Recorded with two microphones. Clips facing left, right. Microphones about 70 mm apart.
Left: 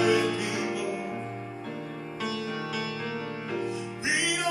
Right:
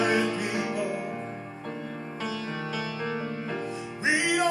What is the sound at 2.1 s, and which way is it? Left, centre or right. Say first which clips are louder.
Music: left 1 dB; right.